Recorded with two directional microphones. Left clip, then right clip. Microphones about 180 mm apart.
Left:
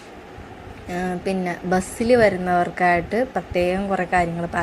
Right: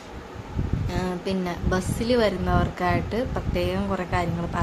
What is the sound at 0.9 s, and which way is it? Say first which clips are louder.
A woman's voice: left 5 dB; 15° left (ahead or behind).